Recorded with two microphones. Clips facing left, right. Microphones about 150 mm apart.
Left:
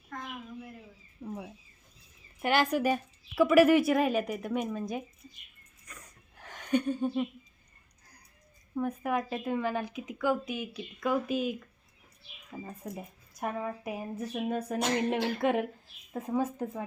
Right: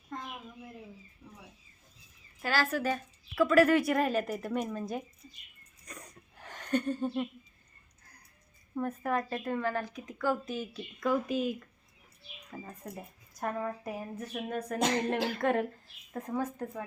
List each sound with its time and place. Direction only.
1.2 s speech: 55° left (ahead or behind)
2.4 s speech: 20° left (ahead or behind); by 5.0 s centre (ahead or behind)
6.3 s a sound: 5° left (ahead or behind)
8.7 s a woman's voice: centre (ahead or behind); by 10.7 s 15° left (ahead or behind)
10.8 s speech: 5° left (ahead or behind)
12.5 s speech: 5° left (ahead or behind)